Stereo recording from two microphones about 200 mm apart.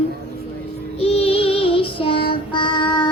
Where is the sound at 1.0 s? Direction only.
30° left (ahead or behind).